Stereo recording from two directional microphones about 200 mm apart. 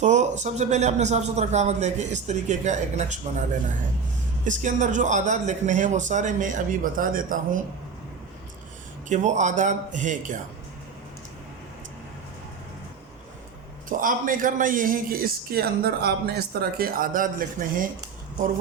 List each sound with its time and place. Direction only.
0.0 s a man's voice: 35° right (ahead or behind)
4.4 s a man's voice: 40° right (ahead or behind)
9.0 s a man's voice: 35° right (ahead or behind)
14.0 s a man's voice: 40° right (ahead or behind)